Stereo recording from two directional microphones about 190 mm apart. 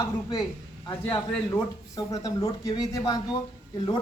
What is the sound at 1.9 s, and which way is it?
Speech, 20° left (ahead or behind).